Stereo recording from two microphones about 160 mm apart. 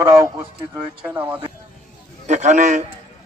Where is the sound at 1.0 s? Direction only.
10° right (ahead or behind).